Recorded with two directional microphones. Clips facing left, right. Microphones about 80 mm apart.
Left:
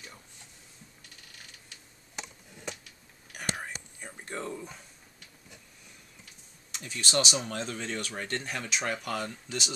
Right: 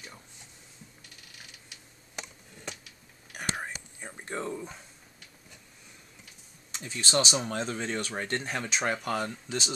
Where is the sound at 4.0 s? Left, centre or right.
Right.